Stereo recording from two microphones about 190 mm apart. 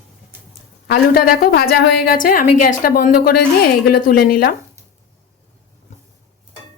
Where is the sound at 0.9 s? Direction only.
50° left (ahead or behind).